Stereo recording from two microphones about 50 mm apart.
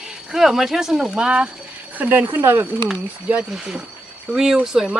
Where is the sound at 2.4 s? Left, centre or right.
Right.